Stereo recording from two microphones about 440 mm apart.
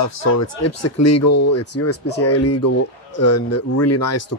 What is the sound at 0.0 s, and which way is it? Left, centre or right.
Speech, left.